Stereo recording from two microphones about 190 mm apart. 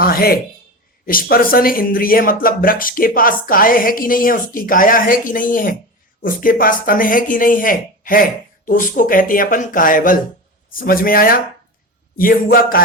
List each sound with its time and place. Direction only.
0.0 s speech: 50° left (ahead or behind)